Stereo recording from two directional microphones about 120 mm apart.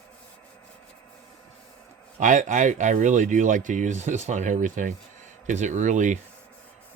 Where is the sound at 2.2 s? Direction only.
90° right.